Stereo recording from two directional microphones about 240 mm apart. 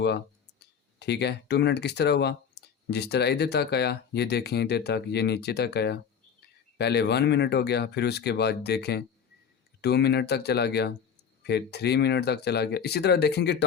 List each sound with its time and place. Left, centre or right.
0.9 s speech: left